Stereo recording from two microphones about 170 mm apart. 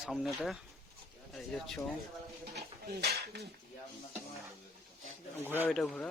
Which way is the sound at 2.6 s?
70° right (ahead or behind).